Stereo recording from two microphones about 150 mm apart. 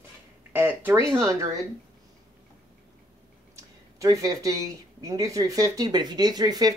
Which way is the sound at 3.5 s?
20° right (ahead or behind).